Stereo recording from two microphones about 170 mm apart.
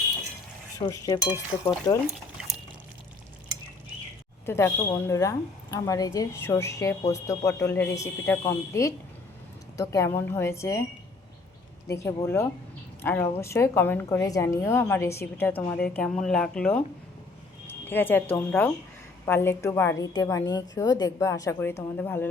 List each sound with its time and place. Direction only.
0.8 s speech: 20° left (ahead or behind)
2.0 s a sound: 5° right (ahead or behind)
4.4 s a woman's voice: 15° left (ahead or behind)
11.9 s a woman's voice: 15° left (ahead or behind)